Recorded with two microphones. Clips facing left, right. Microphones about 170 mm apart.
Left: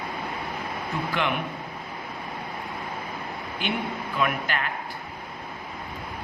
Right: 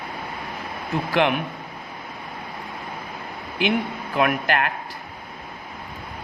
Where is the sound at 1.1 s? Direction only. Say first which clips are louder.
Right 8 dB; 65° right (ahead or behind).